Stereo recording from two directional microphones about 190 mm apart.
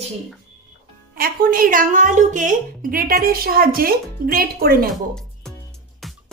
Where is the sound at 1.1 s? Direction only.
50° right (ahead or behind).